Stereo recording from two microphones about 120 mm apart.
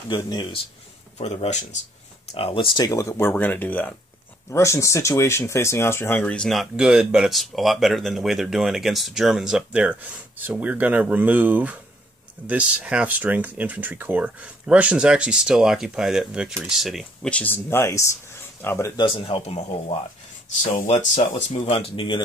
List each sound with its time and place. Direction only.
0.1 s speech: 40° left (ahead or behind)
1.1 s speech: 65° left (ahead or behind)
2.3 s speech: 50° left (ahead or behind)
2.8 s speech: 25° left (ahead or behind)
4.5 s speech: 25° left (ahead or behind); by 17.3 s centre (ahead or behind)
17.3 s speech: 15° left (ahead or behind)
18.9 s speech: 45° left (ahead or behind)
20.6 s speech: 80° left
21.7 s speech: 55° left (ahead or behind)